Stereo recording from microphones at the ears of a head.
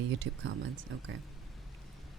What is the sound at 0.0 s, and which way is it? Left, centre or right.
Speech, right.